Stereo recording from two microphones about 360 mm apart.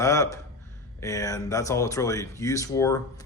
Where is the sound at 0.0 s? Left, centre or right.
Centre.